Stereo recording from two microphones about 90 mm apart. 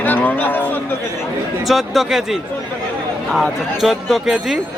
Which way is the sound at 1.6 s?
Centre (ahead or behind).